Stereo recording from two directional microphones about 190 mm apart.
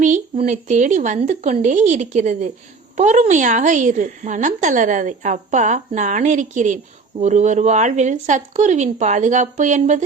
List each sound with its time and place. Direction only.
0.0 s a woman's voice: 40° right (ahead or behind)